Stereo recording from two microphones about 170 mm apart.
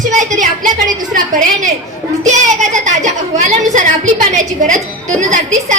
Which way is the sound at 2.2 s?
45° right (ahead or behind).